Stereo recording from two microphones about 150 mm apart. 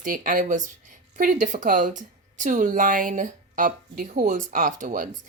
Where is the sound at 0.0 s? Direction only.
60° right (ahead or behind).